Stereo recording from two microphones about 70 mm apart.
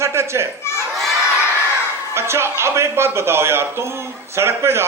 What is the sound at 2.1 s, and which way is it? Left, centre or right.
Speech, right.